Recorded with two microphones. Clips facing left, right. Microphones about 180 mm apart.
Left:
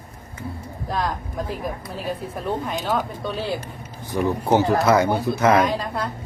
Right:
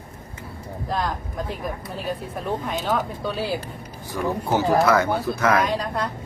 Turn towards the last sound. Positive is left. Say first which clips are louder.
# left 1 dB
turn(degrees=0)  # may be behind; listen again after turning